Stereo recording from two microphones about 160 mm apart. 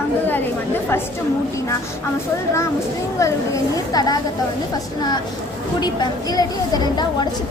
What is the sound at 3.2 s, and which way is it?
A woman's voice, 20° left (ahead or behind).